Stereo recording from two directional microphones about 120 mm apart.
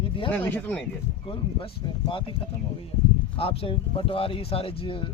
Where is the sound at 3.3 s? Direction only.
50° left (ahead or behind).